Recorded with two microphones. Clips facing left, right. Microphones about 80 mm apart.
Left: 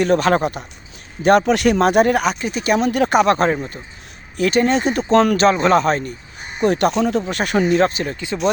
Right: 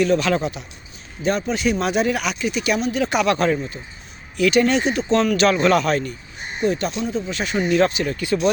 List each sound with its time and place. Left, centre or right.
0.0 s speech: left
1.2 s speech: left
1.8 s speech: left
2.8 s speech: left
5.5 s speech: left
6.6 s speech: left
7.7 s speech: left
8.1 s speech: left